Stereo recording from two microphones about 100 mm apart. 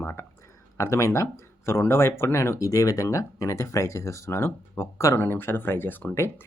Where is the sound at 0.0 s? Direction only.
25° left (ahead or behind).